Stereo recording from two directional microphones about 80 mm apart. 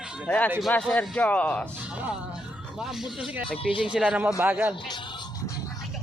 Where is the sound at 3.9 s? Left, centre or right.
Centre.